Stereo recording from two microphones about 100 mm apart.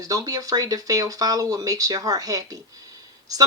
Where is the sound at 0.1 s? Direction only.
40° right (ahead or behind).